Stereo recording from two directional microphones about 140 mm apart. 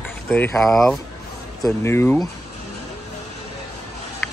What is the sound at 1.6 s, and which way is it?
Speech, 20° left (ahead or behind).